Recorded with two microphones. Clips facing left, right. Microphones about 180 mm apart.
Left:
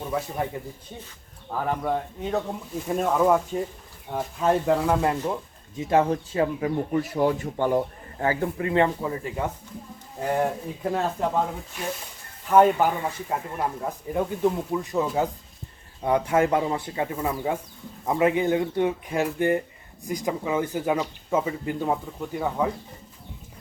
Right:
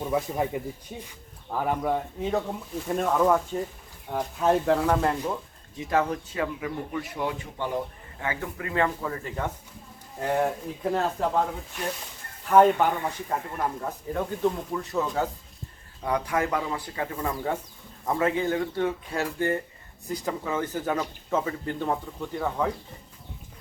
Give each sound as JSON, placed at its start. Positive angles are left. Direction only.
{"t": 0.0, "sound": "speech", "side_deg": -15}
{"t": 5.9, "sound": "speech", "side_deg": 30}
{"t": 8.2, "sound": "speech", "side_deg": 35}
{"t": 16.0, "sound": "speech", "side_deg": 25}
{"t": 17.2, "sound": "speech", "side_deg": 10}